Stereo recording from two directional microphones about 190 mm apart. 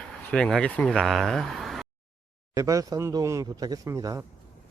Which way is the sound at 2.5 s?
15° right (ahead or behind).